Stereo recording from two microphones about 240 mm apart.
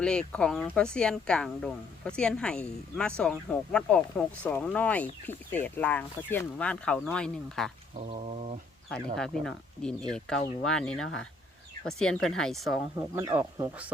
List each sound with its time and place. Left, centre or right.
0.0 s speech: centre
8.1 s speech: right
8.9 s speech: centre
13.0 s speech: centre